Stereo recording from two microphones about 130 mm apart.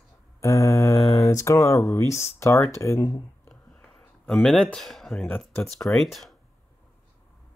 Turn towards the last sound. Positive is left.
turn(degrees=0)  # may be behind; listen again after turning